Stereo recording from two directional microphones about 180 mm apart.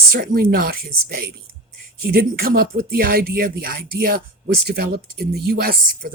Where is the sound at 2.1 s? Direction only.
60° right (ahead or behind).